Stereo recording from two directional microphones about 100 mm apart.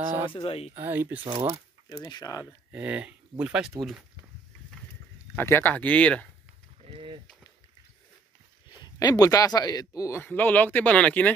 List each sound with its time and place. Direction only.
0.3 s speech: 65° left (ahead or behind)
0.7 s speech: 25° right (ahead or behind)
1.2 s speech: 60° right (ahead or behind)
2.0 s speech: 40° left (ahead or behind)
2.7 s speech: 15° right (ahead or behind)
5.3 s speech: 20° left (ahead or behind)
6.8 s a sound: 70° right (ahead or behind)
8.8 s speech: 40° left (ahead or behind)
10.1 s speech: 20° left (ahead or behind)